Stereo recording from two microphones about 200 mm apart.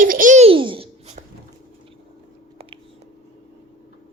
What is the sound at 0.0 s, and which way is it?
Babbling, 45° right (ahead or behind).